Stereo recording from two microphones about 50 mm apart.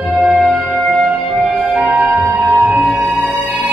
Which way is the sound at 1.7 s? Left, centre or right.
Right.